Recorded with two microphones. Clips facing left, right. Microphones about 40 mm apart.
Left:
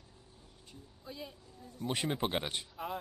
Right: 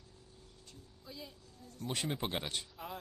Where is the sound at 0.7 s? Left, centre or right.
Left.